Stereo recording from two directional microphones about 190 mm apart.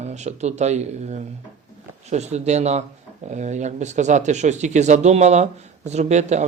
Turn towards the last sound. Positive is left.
turn(degrees=-35)  # may be behind; listen again after turning